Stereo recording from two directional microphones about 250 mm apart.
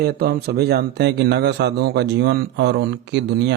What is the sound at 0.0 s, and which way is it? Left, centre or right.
Speech, right.